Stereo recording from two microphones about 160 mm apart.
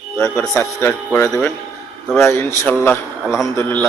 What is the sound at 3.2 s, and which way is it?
Speech, 5° right (ahead or behind).